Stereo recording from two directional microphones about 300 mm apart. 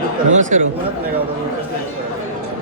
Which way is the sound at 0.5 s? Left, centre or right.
Right.